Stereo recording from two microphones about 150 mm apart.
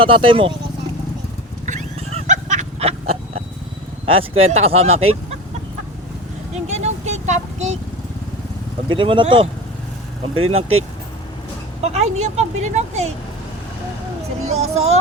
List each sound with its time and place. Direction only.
0.0 s speech: 35° right (ahead or behind)
1.6 s roaring cats: 50° right (ahead or behind)
4.0 s speech: 40° right (ahead or behind)
6.7 s vehicle: 50° right (ahead or behind)
8.9 s speech: 35° right (ahead or behind)
10.5 s speech: 40° right (ahead or behind)
11.8 s speech: 45° right (ahead or behind)
14.4 s speech: 45° right (ahead or behind)